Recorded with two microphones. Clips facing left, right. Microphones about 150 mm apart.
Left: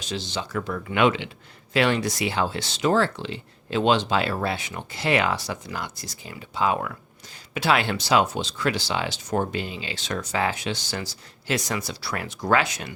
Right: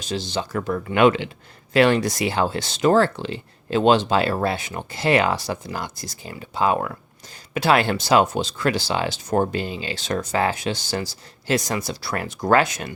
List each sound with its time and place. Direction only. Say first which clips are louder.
0.1 s speech: right 4 dB; 40° right (ahead or behind)